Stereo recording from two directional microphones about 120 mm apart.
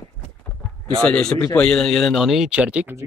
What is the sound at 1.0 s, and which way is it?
A man's voice, 10° left (ahead or behind).